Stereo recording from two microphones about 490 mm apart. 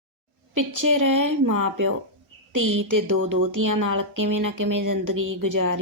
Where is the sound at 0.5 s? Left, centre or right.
Right.